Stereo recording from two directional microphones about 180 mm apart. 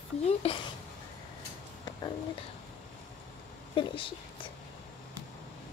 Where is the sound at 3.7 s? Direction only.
30° left (ahead or behind).